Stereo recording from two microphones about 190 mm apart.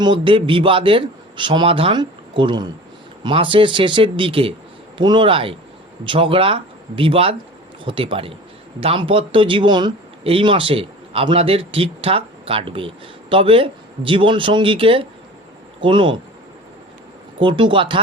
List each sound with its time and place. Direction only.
0.0 s speech: 25° right (ahead or behind)
17.4 s speech: 25° right (ahead or behind)